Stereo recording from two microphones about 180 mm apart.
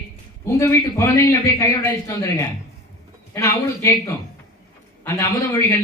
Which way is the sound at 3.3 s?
15° left (ahead or behind).